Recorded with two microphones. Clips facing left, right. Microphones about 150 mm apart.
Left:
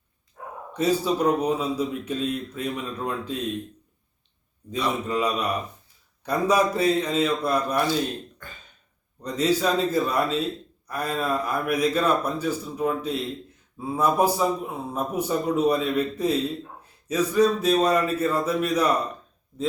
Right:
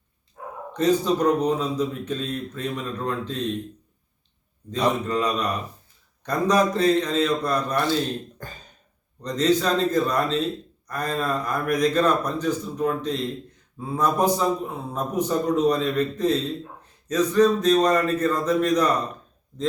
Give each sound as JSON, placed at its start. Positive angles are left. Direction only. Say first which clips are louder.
{"t": 0.7, "sound": "a man's voice", "louder": "right 2 dB", "side_deg": 10}
{"t": 5.0, "sound": "a man's voice", "louder": "right 1 dB", "side_deg": 10}
{"t": 8.4, "sound": "throat clearing", "louder": "right 5 dB", "side_deg": -40}
{"t": 9.2, "sound": "a man's voice", "louder": "right 1 dB", "side_deg": 10}